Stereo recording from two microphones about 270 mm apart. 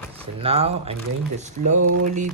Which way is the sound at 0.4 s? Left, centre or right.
Right.